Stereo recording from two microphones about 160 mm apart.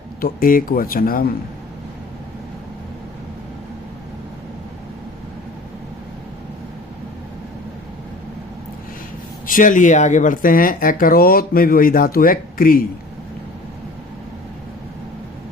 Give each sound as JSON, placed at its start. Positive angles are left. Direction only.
{"t": 0.2, "sound": "speech", "side_deg": 65}
{"t": 9.5, "sound": "speech", "side_deg": 55}